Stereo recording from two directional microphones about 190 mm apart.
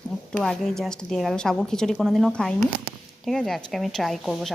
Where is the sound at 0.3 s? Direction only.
5° left (ahead or behind).